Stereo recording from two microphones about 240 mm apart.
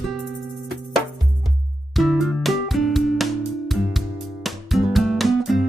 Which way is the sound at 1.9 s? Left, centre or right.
Centre.